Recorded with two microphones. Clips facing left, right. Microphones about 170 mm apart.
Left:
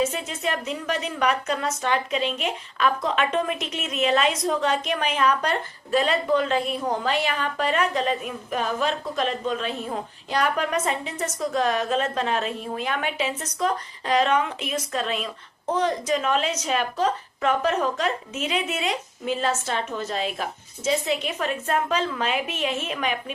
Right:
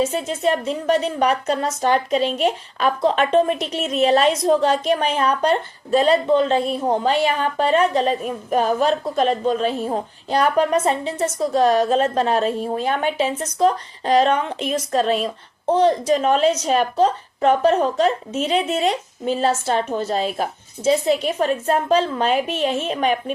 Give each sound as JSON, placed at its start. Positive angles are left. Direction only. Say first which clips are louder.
{"t": 0.0, "sound": "a woman's voice", "louder": "right 5 dB", "side_deg": -35}